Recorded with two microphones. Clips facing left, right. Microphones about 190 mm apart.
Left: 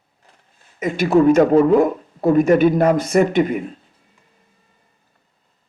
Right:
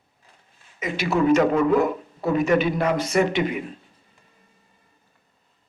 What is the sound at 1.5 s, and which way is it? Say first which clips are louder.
Speech: left 7 dB; 30° left (ahead or behind).